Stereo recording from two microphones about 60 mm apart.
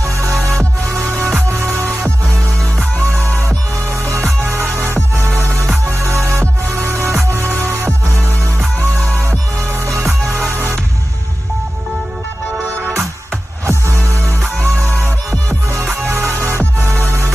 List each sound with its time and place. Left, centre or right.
0.0 s music: right
3.0 s music: right
9.0 s music: left
9.8 s music: right
13.7 s music: right
14.9 s music: left
15.7 s music: right